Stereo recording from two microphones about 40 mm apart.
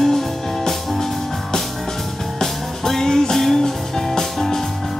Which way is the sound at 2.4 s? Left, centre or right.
Centre.